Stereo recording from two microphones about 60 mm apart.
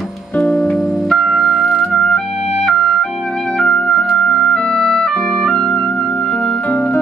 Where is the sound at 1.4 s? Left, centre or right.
Left.